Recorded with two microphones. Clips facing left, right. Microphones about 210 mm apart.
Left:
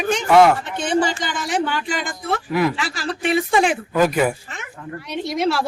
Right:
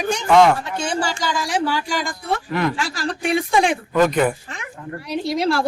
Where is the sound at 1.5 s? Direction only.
Centre (ahead or behind).